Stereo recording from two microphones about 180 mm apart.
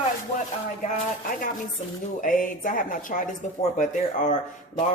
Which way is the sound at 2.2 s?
50° left (ahead or behind).